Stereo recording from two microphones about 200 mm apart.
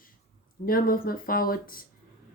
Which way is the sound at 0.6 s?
45° left (ahead or behind).